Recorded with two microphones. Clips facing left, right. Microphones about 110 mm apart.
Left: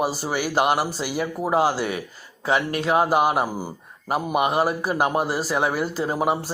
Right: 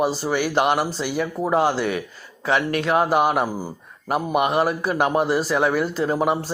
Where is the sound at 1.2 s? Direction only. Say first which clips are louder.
Right 1 dB; 5° left (ahead or behind).